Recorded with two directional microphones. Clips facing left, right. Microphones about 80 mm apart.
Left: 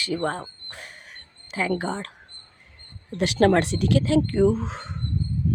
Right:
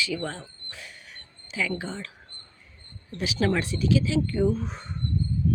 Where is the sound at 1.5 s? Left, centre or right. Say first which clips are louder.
Left 5 dB; left.